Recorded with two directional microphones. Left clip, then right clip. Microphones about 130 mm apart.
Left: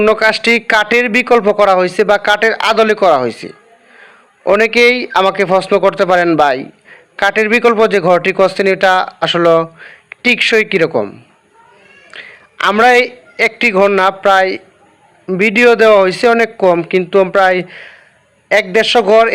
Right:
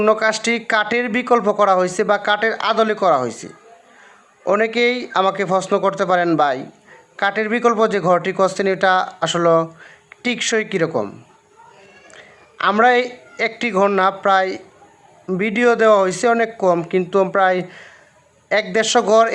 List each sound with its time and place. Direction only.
0.1 s a man's voice: 25° left (ahead or behind)
12.1 s a sound: 25° left (ahead or behind)
12.8 s a man's voice: 25° left (ahead or behind)